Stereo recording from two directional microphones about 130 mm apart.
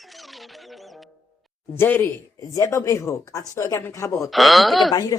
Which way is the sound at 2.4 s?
25° left (ahead or behind).